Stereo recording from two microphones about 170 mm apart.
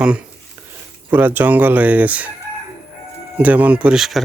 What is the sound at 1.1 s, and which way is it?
Speech, 10° right (ahead or behind).